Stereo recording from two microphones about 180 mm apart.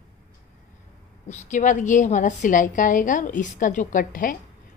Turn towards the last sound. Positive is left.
turn(degrees=50)  # may be behind; listen again after turning